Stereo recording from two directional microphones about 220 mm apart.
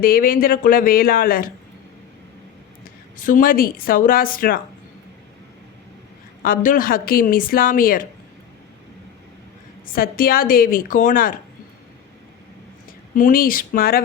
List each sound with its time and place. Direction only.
0.0 s a woman's voice: 40° left (ahead or behind)
3.2 s a woman's voice: 40° left (ahead or behind)
6.4 s a woman's voice: 40° left (ahead or behind)
9.8 s a woman's voice: 40° left (ahead or behind)
13.1 s a woman's voice: 40° left (ahead or behind)